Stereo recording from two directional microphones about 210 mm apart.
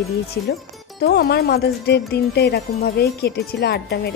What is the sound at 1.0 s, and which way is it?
A woman's voice, 50° left (ahead or behind).